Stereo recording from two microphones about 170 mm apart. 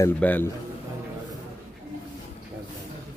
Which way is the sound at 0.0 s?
10° left (ahead or behind).